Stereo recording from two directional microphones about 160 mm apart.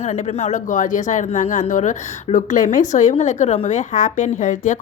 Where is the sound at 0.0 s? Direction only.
45° left (ahead or behind).